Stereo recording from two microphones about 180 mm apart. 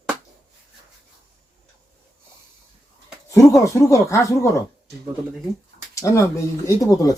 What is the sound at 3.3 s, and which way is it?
Speech, 15° left (ahead or behind).